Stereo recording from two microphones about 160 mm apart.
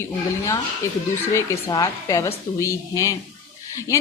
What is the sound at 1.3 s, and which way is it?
A woman's voice, 20° left (ahead or behind).